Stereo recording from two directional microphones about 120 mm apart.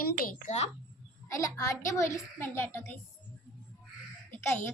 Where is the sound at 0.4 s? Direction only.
70° left (ahead or behind).